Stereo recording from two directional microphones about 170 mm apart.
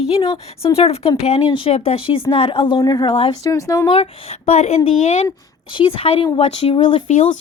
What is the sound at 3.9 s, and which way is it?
A woman's voice, 35° left (ahead or behind).